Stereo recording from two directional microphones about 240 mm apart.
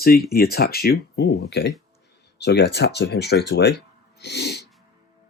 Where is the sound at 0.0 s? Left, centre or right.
Left.